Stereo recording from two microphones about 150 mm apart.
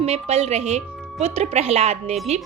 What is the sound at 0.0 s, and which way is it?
A woman's voice, 45° right (ahead or behind).